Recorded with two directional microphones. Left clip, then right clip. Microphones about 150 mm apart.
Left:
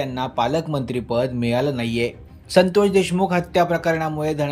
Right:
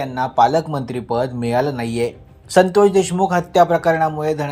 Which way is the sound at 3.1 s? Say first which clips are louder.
Right 4 dB; 20° left (ahead or behind).